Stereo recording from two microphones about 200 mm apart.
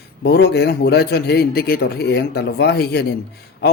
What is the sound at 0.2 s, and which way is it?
A man's voice, 55° left (ahead or behind).